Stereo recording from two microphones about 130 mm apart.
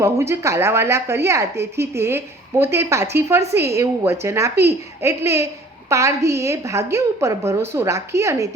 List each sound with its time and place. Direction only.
0.0 s a woman's voice: 20° right (ahead or behind)